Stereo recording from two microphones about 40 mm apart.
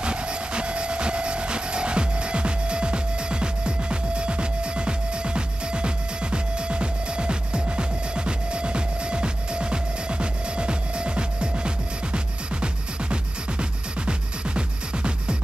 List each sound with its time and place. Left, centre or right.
0.0 s train: right
8.3 s music: right